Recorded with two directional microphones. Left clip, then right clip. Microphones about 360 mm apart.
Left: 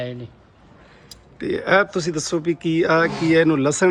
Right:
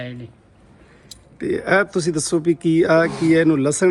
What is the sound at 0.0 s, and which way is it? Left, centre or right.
Speech, centre.